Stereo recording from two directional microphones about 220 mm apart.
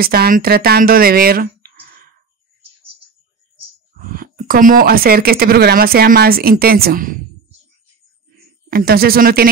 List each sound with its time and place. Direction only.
0.0 s speech: 45° right (ahead or behind)
4.1 s speech: 40° right (ahead or behind)
8.6 s speech: 45° right (ahead or behind)